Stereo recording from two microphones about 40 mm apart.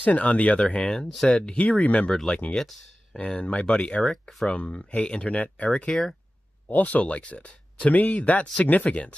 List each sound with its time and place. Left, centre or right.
0.0 s speech: left
1.2 s speech: left
1.6 s speech: left
2.3 s speech: left